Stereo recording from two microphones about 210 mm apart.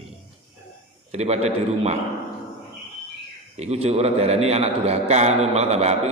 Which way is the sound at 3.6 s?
30° right (ahead or behind).